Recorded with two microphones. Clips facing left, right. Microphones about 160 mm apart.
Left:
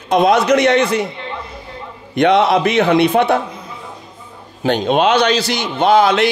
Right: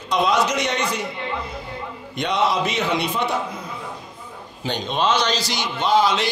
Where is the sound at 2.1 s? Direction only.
65° left (ahead or behind).